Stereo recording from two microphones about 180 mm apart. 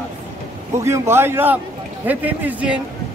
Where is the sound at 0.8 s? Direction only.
15° right (ahead or behind).